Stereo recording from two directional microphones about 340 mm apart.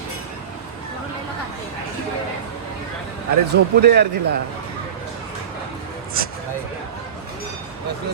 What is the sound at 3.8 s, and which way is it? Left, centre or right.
Speech, right.